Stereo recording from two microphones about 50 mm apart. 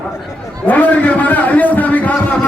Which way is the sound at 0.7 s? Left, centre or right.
Left.